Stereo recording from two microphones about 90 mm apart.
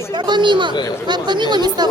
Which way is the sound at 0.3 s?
60° right (ahead or behind).